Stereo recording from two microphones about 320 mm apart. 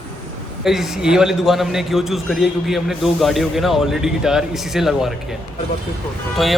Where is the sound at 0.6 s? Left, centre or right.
Centre.